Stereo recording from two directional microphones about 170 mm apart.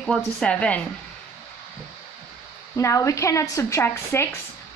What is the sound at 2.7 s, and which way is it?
Speech, 20° left (ahead or behind).